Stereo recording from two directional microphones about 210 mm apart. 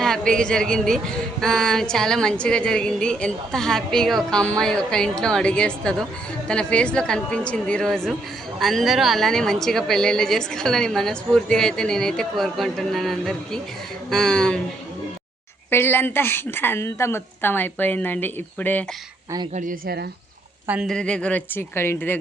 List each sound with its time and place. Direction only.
0.0 s speech: 5° left (ahead or behind)
15.7 s a woman's voice: 10° left (ahead or behind)
19.5 s a woman's voice: 45° right (ahead or behind)
20.7 s speech: centre (ahead or behind)